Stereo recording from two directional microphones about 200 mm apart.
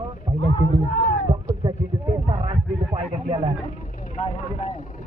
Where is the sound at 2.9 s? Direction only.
30° right (ahead or behind).